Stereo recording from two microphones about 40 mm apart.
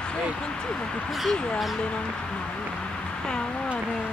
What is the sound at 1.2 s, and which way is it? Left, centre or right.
Speech, centre.